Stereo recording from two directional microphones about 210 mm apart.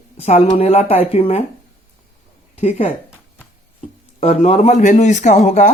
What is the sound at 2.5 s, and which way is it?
Speech, 30° left (ahead or behind).